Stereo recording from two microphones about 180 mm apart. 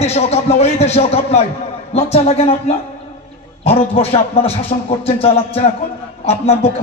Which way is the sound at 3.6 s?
35° left (ahead or behind).